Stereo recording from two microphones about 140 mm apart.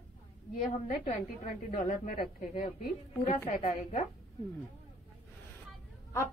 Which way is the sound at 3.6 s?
60° left (ahead or behind).